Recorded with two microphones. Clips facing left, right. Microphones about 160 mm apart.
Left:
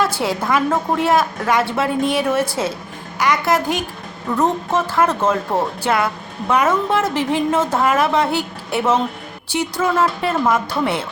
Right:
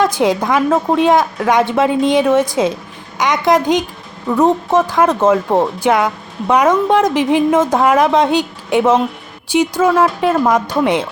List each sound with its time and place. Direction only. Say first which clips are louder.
0.0 s a woman's voice: right 6 dB; 15° right (ahead or behind)